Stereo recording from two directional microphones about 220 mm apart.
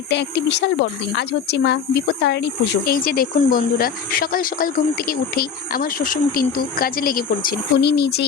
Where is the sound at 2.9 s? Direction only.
40° left (ahead or behind).